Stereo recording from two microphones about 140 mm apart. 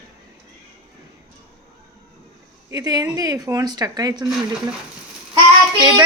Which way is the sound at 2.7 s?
25° right (ahead or behind).